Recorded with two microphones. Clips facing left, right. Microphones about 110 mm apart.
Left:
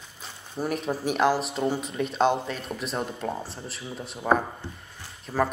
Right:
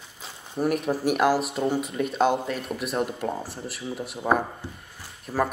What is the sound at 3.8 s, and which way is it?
Speech, 5° right (ahead or behind).